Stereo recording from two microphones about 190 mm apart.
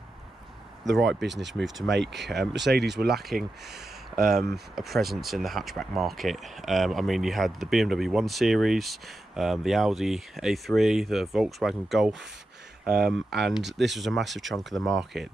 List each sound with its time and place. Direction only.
1.2 s speech: 70° right (ahead or behind)
1.5 s speech: centre (ahead or behind)
2.5 s speech: 60° right (ahead or behind)
3.3 s speech: centre (ahead or behind)